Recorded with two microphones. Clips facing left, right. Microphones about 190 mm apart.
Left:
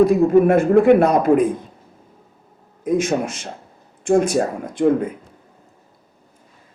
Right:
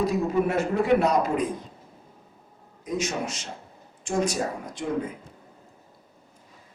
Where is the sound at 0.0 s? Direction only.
55° left (ahead or behind).